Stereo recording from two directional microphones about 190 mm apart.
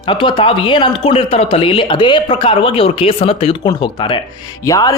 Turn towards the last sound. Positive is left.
turn(degrees=15)  # may be behind; listen again after turning